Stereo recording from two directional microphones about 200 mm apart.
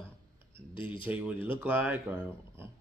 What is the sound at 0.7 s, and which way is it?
Speech, 25° left (ahead or behind).